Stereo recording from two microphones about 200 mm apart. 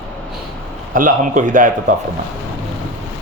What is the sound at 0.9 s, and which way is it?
A man's voice, 40° right (ahead or behind).